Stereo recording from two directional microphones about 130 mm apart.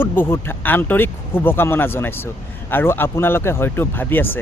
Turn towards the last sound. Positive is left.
turn(degrees=15)  # may be behind; listen again after turning